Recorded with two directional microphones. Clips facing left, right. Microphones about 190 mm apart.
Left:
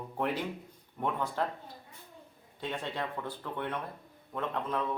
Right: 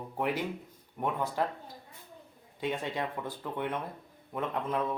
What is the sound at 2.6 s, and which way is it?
Speech, 10° right (ahead or behind).